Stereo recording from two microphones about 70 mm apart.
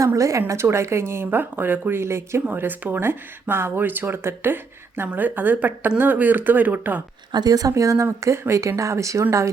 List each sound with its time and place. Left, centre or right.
0.0 s a woman's voice: right
7.3 s speech: right
7.7 s speech: right